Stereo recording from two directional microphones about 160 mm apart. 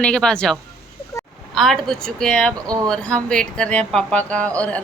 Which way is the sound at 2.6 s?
25° right (ahead or behind).